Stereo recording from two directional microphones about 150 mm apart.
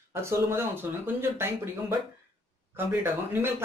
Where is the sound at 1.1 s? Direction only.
15° right (ahead or behind).